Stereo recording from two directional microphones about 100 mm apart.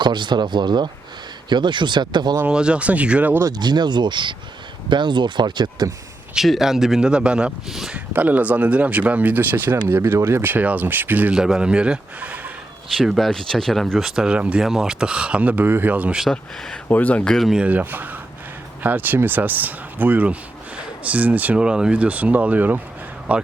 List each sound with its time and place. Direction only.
0.0 s speech: 50° right (ahead or behind)
2.5 s speech: 10° right (ahead or behind)
3.4 s speech: 45° right (ahead or behind)
6.3 s a man's voice: centre (ahead or behind)
8.1 s speech: 15° right (ahead or behind)
13.0 s a man's voice: centre (ahead or behind)
14.2 s speech: 10° right (ahead or behind)
16.3 s speech: 5° left (ahead or behind)
17.5 s speech: 15° right (ahead or behind)